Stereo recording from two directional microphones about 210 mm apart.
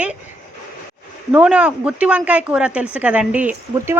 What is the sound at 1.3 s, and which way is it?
Speech, 5° right (ahead or behind).